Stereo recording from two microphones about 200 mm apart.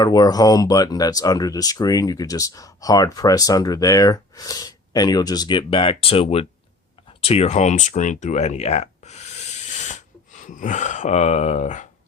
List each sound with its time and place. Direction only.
0.0 s speech: 20° left (ahead or behind)
7.2 s a sound: 30° left (ahead or behind)
10.4 s speech: 40° left (ahead or behind)